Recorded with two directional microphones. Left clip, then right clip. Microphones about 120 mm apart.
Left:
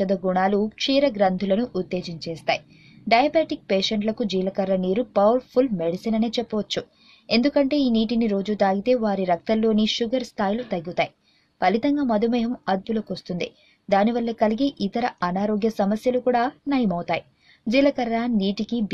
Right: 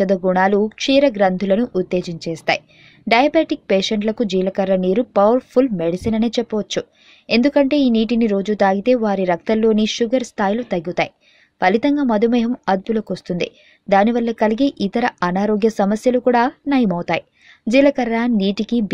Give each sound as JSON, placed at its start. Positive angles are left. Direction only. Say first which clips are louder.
{"t": 0.0, "sound": "speech", "louder": "right 6 dB", "side_deg": -40}